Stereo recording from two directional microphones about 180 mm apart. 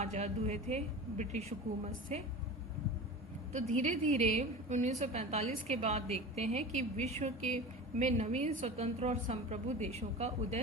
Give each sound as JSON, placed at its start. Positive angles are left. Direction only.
{"t": 0.0, "sound": "a woman's voice", "side_deg": -40}
{"t": 3.5, "sound": "a woman's voice", "side_deg": -40}